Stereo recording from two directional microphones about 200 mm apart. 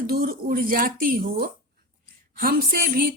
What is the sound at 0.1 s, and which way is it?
A woman's voice, 50° right (ahead or behind).